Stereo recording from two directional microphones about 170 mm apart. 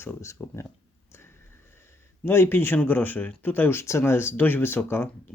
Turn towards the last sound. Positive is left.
turn(degrees=10)  # may be behind; listen again after turning